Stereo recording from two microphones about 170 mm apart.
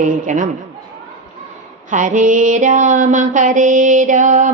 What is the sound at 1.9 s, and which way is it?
Mantra, 50° right (ahead or behind).